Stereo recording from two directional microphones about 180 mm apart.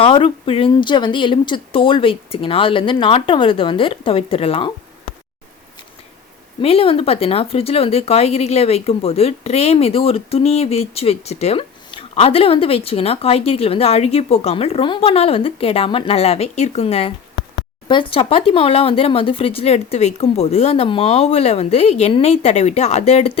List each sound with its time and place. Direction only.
0.0 s speech: 30° left (ahead or behind)
6.6 s speech: 30° left (ahead or behind)